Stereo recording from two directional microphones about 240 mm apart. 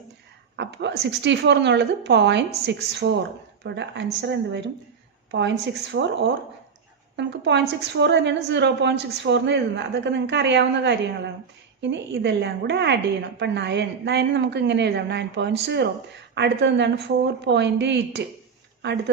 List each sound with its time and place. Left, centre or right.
0.5 s a woman's voice: right